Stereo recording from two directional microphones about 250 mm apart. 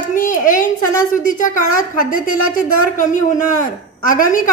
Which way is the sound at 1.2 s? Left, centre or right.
Left.